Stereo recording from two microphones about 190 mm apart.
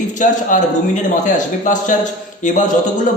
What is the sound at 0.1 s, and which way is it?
A man's voice, 40° left (ahead or behind).